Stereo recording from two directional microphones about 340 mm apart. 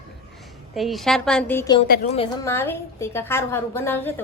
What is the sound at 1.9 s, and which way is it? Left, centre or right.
Speech, left.